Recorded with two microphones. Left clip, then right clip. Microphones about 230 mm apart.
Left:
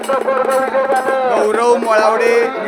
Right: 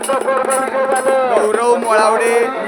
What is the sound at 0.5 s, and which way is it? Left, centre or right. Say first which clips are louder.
Speech: left 1 dB; right.